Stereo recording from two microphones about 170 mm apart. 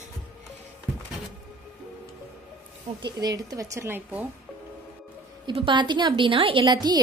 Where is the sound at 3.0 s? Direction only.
25° right (ahead or behind).